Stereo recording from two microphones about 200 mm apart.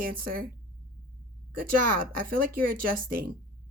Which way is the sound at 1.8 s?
45° right (ahead or behind).